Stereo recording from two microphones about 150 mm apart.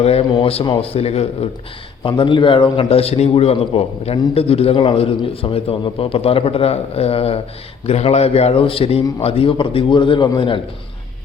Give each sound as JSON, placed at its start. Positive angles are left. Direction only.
{"t": 0.0, "sound": "a man's voice", "side_deg": 40}